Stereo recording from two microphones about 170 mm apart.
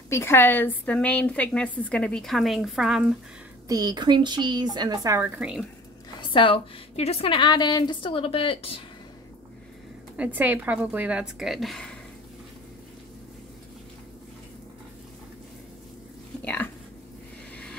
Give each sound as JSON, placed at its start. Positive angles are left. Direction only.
{"t": 0.1, "sound": "a woman's voice", "side_deg": 15}
{"t": 3.6, "sound": "a woman's voice", "side_deg": -20}
{"t": 6.3, "sound": "a woman's voice", "side_deg": 30}
{"t": 10.1, "sound": "a woman's voice", "side_deg": -10}
{"t": 16.4, "sound": "a sound", "side_deg": 10}